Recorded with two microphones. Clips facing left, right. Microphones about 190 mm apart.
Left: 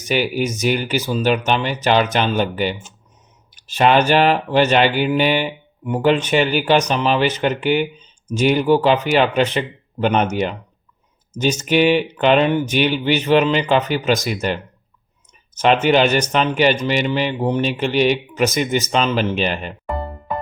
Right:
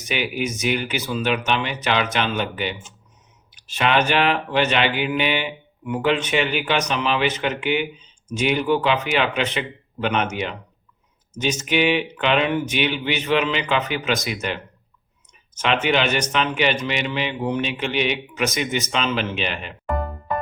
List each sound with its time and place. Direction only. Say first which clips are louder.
0.1 s speech: left 5 dB; 35° left (ahead or behind)